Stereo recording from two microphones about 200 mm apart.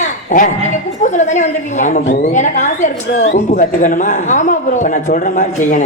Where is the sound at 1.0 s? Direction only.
35° left (ahead or behind).